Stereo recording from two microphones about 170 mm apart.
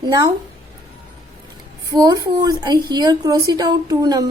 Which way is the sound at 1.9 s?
25° right (ahead or behind).